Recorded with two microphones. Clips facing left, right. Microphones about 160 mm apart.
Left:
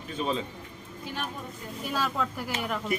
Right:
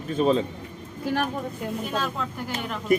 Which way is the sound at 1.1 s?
65° right (ahead or behind).